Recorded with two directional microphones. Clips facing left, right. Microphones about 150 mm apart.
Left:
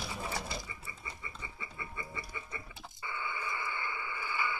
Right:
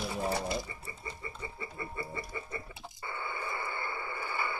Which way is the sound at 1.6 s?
35° right (ahead or behind).